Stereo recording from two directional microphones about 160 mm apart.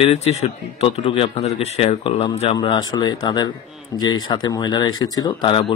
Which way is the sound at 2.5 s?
25° left (ahead or behind).